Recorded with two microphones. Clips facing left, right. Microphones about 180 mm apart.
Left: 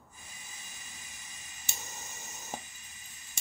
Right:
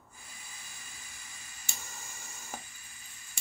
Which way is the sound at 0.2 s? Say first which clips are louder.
Even; 20° left (ahead or behind).